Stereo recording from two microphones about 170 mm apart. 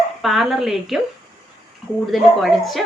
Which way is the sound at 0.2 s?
Centre (ahead or behind).